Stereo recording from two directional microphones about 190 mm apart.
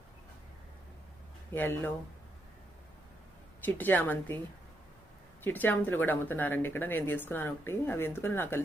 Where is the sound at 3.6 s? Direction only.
10° left (ahead or behind).